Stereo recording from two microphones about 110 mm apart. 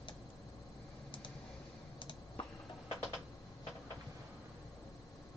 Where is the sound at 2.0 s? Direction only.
45° left (ahead or behind).